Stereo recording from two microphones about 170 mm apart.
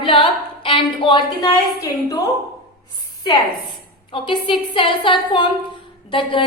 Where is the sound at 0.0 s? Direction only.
30° left (ahead or behind).